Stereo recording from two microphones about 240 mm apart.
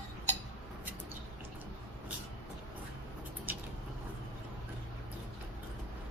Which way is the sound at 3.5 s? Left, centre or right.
Centre.